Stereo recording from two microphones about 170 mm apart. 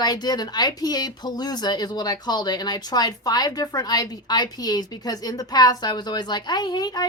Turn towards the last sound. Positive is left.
turn(degrees=25)  # may be behind; listen again after turning